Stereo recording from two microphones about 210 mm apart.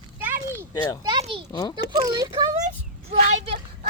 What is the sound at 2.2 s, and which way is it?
Speech, 20° right (ahead or behind).